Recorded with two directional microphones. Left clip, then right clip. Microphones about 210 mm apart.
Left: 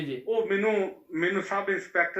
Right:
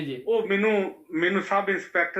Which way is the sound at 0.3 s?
40° right (ahead or behind).